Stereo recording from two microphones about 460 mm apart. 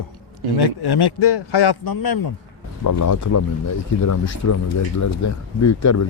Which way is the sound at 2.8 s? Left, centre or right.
Left.